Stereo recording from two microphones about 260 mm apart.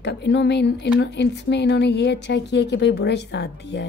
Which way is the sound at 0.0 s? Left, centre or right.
Left.